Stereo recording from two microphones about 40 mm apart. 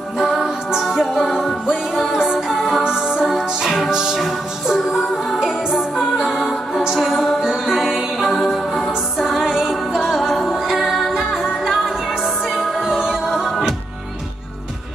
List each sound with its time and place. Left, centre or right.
0.2 s music: centre
1.1 s music: centre
2.8 s music: centre
5.4 s music: centre
6.3 s music: centre
9.4 s music: centre
12.8 s music: centre